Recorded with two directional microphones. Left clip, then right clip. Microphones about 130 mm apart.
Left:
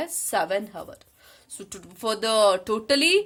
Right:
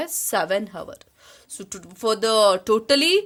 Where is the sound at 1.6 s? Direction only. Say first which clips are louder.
Right 5 dB; 40° right (ahead or behind).